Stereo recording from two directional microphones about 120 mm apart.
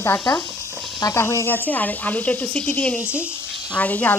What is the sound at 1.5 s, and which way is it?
Speech, 15° left (ahead or behind).